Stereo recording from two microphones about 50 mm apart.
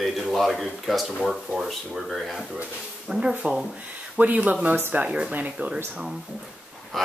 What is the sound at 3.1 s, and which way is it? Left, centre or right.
Speech, centre.